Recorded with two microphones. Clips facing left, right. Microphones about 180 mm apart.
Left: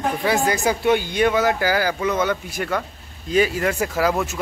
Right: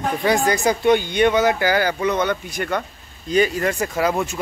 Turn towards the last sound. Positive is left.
turn(degrees=0)  # may be behind; listen again after turning